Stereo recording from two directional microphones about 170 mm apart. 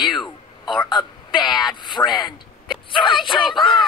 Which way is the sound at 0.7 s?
25° left (ahead or behind).